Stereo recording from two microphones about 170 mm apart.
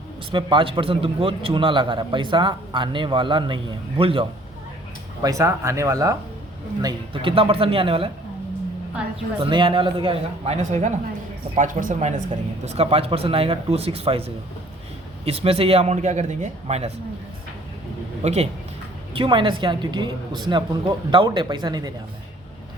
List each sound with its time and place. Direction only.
0.3 s a man's voice: 30° right (ahead or behind)
5.2 s a man's voice: 20° right (ahead or behind)
6.8 s a man's voice: 30° right (ahead or behind)
9.4 s a man's voice: 30° right (ahead or behind)
18.2 s a man's voice: 40° right (ahead or behind)
19.1 s a man's voice: 30° right (ahead or behind)